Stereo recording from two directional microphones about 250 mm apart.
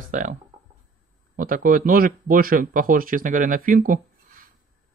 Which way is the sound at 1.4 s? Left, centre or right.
Right.